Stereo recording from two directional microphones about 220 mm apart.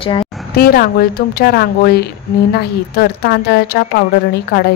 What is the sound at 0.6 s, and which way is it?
A woman's voice, 45° left (ahead or behind).